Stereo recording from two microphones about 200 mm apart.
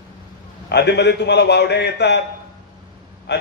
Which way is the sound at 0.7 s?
55° left (ahead or behind).